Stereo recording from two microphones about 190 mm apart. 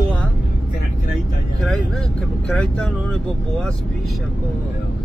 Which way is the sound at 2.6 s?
5° left (ahead or behind).